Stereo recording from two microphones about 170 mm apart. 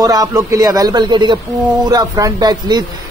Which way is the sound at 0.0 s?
20° right (ahead or behind).